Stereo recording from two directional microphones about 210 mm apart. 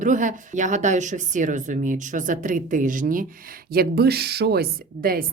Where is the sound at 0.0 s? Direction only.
35° right (ahead or behind).